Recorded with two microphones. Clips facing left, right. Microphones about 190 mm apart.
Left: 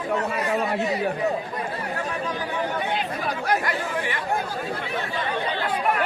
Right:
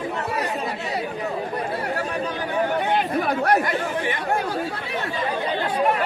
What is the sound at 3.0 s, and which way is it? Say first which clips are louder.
Chatter: right 6 dB; 55° right (ahead or behind).